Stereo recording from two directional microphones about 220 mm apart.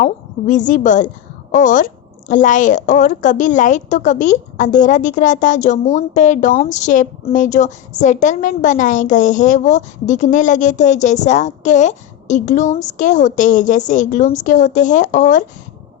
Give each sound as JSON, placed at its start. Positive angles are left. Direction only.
{"t": 0.0, "sound": "a woman's voice", "side_deg": 35}